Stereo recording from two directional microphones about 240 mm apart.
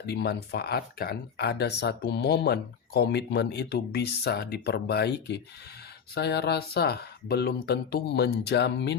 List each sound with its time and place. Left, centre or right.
0.0 s speech: left